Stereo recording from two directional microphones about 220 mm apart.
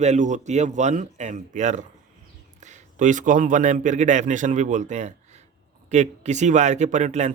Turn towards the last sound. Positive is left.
turn(degrees=-30)  # may be behind; listen again after turning